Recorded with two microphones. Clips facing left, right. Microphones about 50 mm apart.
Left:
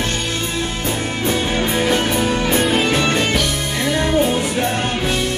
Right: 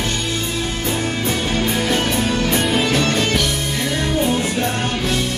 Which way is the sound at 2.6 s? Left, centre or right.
Centre.